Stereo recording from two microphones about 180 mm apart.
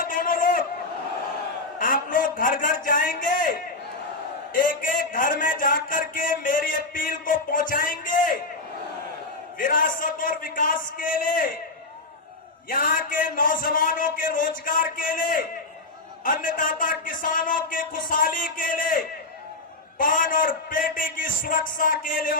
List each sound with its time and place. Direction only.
0.0 s a sound: 50° left (ahead or behind)
1.8 s a sound: 50° left (ahead or behind)
4.5 s a man's voice: 50° left (ahead or behind)
9.6 s a man's voice: 50° left (ahead or behind)
12.6 s a man's voice: 50° left (ahead or behind)
20.0 s a man's voice: 50° left (ahead or behind)